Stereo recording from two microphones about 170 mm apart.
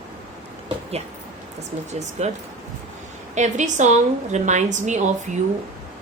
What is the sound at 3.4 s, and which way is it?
A woman's voice, 45° right (ahead or behind).